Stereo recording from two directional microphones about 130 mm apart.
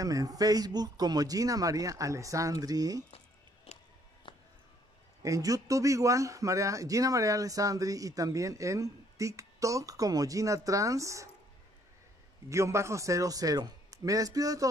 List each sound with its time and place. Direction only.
0.0 s a man's voice: 25° right (ahead or behind)
3.7 s music: 55° left (ahead or behind)
4.3 s a sound: 45° left (ahead or behind)
5.2 s a man's voice: 25° right (ahead or behind)
12.4 s a man's voice: 20° right (ahead or behind)